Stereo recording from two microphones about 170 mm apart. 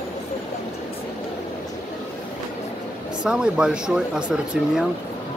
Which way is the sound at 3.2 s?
5° right (ahead or behind).